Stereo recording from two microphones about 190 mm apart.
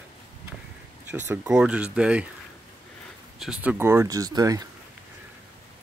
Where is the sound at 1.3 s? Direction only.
5° right (ahead or behind).